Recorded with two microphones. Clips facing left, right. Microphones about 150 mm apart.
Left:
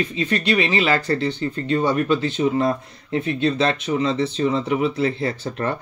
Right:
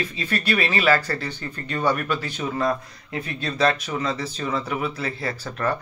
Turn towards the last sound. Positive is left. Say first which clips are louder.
# left 1 dB
turn(degrees=25)  # may be behind; listen again after turning